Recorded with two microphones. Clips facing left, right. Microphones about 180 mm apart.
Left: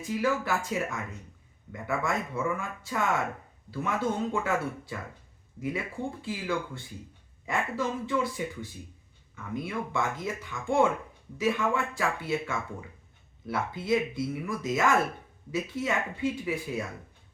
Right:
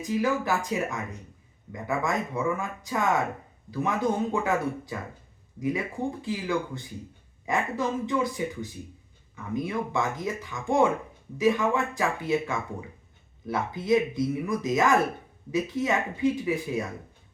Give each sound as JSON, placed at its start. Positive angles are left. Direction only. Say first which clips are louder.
{"t": 0.0, "sound": "speech", "louder": "right 2 dB", "side_deg": -20}